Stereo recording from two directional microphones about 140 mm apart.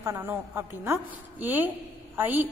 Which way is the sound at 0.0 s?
20° right (ahead or behind).